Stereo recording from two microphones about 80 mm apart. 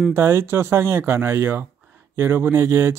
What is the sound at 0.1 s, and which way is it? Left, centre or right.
Speech, right.